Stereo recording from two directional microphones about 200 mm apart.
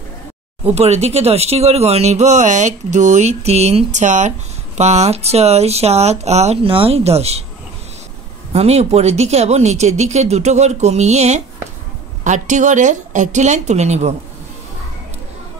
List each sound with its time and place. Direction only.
0.7 s speech: 30° right (ahead or behind)
8.5 s speech: 30° right (ahead or behind)